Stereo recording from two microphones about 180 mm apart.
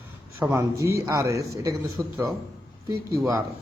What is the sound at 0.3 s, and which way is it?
A man's voice, 15° right (ahead or behind).